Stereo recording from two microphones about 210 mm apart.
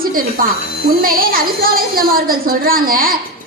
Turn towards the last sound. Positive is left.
turn(degrees=-45)  # may be behind; listen again after turning